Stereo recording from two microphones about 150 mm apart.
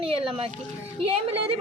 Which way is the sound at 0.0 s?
40° right (ahead or behind).